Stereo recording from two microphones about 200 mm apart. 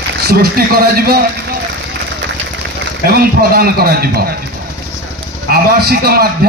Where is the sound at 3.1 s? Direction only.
50° right (ahead or behind).